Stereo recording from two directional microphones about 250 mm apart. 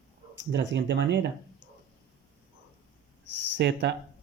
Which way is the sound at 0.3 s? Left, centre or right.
Right.